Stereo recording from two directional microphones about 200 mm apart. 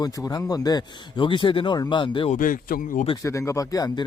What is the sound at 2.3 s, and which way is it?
Speech, 40° left (ahead or behind).